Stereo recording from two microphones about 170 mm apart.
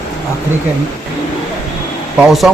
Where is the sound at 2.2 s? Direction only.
Centre (ahead or behind).